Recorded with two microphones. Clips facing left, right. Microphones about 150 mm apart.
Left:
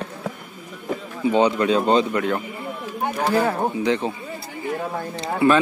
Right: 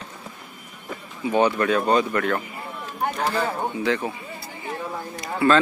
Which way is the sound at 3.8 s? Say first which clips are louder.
Left 1 dB; 20° left (ahead or behind).